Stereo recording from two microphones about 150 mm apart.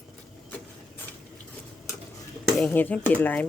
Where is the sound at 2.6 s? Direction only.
10° left (ahead or behind).